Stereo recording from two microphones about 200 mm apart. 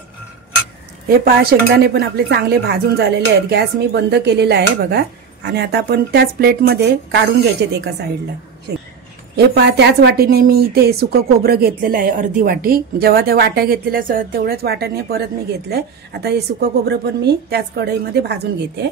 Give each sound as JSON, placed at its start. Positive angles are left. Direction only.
{"t": 1.0, "sound": "speech", "side_deg": -50}
{"t": 9.5, "sound": "a woman's voice", "side_deg": -55}